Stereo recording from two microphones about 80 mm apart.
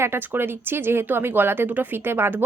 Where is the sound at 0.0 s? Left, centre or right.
Right.